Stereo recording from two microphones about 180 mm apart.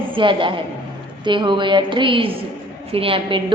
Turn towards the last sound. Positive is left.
turn(degrees=-30)  # may be behind; listen again after turning